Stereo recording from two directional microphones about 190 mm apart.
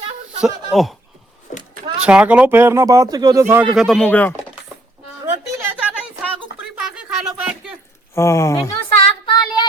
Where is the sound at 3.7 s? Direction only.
Centre (ahead or behind).